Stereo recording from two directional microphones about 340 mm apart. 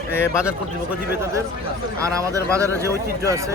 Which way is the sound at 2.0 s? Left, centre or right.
Centre.